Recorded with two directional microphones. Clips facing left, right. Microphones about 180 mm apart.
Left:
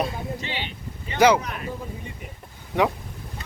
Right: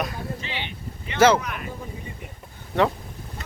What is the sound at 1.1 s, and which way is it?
Speech, 15° left (ahead or behind).